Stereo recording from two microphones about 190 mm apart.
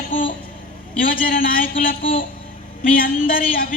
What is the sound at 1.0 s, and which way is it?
Speech, 50° left (ahead or behind).